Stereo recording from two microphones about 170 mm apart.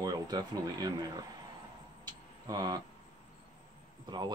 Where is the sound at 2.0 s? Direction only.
25° right (ahead or behind).